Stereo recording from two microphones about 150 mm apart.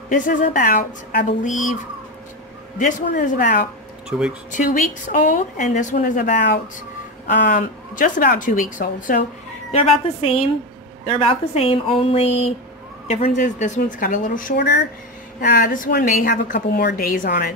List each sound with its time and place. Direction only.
0.1 s a woman's voice: 60° left (ahead or behind)
2.8 s a woman's voice: 60° left (ahead or behind)
4.1 s speech: 5° right (ahead or behind)
4.5 s a woman's voice: 60° left (ahead or behind)
7.4 s a woman's voice: 60° left (ahead or behind)
9.7 s a woman's voice: 40° left (ahead or behind)
13.4 s a woman's voice: 60° left (ahead or behind); by 14.8 s 80° left
15.4 s a woman's voice: 65° left (ahead or behind)